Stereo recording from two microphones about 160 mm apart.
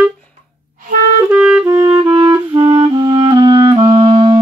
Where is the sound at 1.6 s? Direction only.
20° right (ahead or behind).